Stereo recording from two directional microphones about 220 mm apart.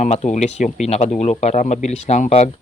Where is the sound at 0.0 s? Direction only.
30° left (ahead or behind).